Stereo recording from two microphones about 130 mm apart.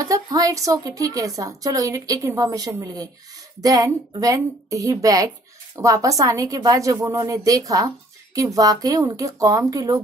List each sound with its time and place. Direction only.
0.0 s a woman's voice: 25° right (ahead or behind)